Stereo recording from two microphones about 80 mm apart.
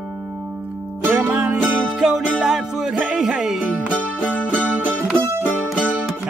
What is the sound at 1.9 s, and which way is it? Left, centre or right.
Music, centre.